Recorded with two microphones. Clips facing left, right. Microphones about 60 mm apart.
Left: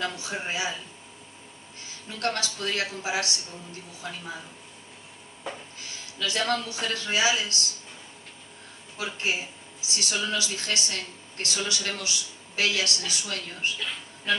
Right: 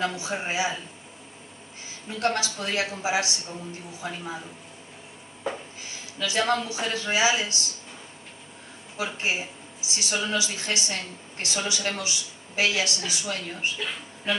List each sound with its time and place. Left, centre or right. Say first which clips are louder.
0.0 s speech: right 3 dB; right
2.0 s speech: right 3 dB; right
5.5 s a sound: right 5 dB; centre
6.1 s speech: right 3 dB; right
8.9 s speech: right 1 dB; right